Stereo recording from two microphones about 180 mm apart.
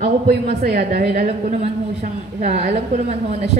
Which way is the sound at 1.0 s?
40° right (ahead or behind).